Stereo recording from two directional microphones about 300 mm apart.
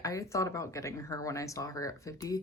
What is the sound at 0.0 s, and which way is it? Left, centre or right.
Speech, centre.